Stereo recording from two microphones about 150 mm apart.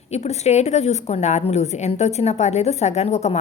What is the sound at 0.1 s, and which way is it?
A woman's voice, 45° left (ahead or behind).